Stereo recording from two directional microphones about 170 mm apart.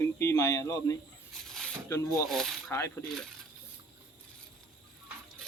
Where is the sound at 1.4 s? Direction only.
Centre (ahead or behind).